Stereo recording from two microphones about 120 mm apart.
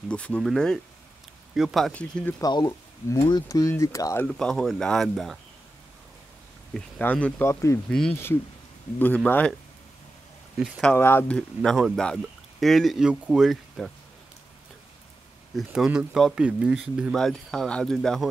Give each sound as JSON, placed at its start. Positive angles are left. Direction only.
{"t": 0.1, "sound": "speech", "side_deg": 10}
{"t": 2.0, "sound": "speech", "side_deg": 10}
{"t": 2.4, "sound": "speech", "side_deg": 30}
{"t": 4.3, "sound": "speech", "side_deg": 5}
{"t": 7.0, "sound": "speech", "side_deg": 15}
{"t": 7.4, "sound": "speech", "side_deg": 25}
{"t": 9.0, "sound": "speech", "side_deg": 15}
{"t": 10.8, "sound": "speech", "side_deg": 15}
{"t": 15.5, "sound": "speech", "side_deg": -5}